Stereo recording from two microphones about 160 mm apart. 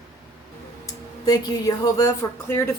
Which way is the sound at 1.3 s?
25° left (ahead or behind).